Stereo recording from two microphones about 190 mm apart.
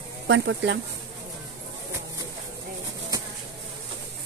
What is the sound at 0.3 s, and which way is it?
Speech, 70° right (ahead or behind).